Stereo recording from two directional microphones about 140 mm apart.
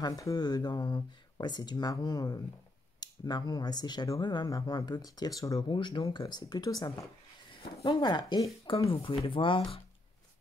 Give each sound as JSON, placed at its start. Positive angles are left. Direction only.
{"t": 0.0, "sound": "speech", "side_deg": 25}